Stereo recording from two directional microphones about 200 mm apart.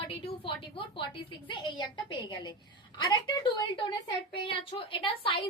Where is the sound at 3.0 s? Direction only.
20° left (ahead or behind).